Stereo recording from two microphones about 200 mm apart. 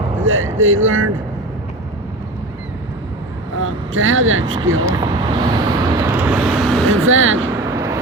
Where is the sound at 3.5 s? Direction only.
75° right (ahead or behind).